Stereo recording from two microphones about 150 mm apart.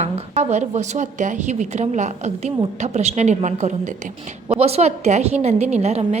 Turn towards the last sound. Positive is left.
turn(degrees=-45)  # may be behind; listen again after turning